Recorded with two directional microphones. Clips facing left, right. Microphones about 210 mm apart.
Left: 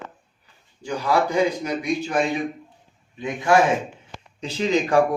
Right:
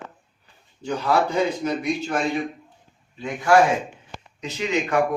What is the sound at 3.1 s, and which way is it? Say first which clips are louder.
Speech: even; 20° left (ahead or behind).